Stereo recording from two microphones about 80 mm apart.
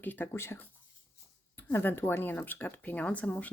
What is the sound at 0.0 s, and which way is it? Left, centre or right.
Speech, left.